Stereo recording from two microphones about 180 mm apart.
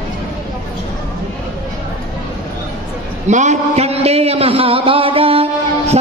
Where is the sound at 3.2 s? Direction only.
40° right (ahead or behind).